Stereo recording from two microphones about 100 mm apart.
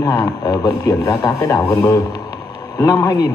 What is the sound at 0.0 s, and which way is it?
Speech, 40° left (ahead or behind).